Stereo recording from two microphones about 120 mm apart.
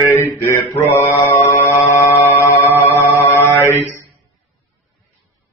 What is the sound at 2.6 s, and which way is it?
A capella, 20° right (ahead or behind).